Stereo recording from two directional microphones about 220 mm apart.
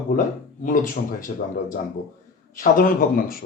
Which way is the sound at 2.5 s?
40° left (ahead or behind).